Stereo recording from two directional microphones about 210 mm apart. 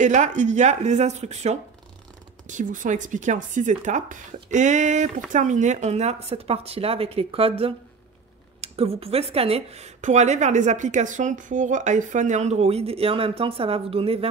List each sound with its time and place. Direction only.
0.0 s speech: 35° right (ahead or behind)